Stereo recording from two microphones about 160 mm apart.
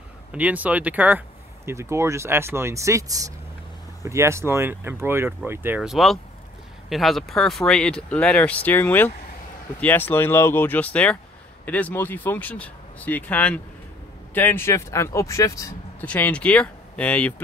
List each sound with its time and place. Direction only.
0.3 s speech: 10° right (ahead or behind)
5.8 s speech: centre (ahead or behind); by 16.1 s 20° left (ahead or behind)
16.1 s speech: 10° left (ahead or behind)